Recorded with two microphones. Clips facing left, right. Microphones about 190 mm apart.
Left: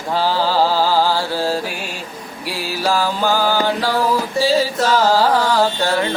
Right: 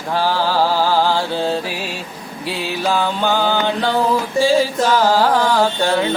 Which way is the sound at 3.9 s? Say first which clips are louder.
Right 1 dB; 15° right (ahead or behind).